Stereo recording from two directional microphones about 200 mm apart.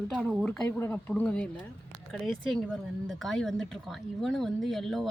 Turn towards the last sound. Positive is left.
turn(degrees=0)  # may be behind; listen again after turning